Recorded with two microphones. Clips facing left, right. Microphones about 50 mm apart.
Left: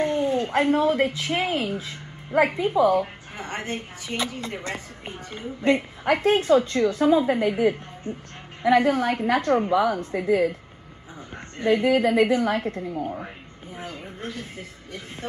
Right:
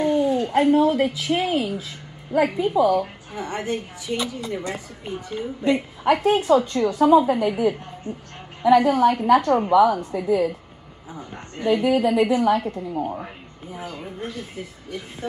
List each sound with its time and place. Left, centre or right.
0.0 s a woman's voice: left
11.5 s a woman's voice: left
12.9 s speech: right
14.2 s a woman's voice: left